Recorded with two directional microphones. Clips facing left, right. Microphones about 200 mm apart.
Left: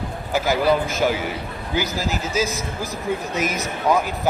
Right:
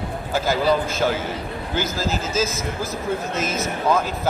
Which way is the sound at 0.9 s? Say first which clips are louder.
Left 1 dB; 15° left (ahead or behind).